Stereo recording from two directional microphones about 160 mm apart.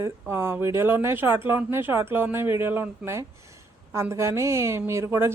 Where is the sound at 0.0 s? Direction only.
15° right (ahead or behind).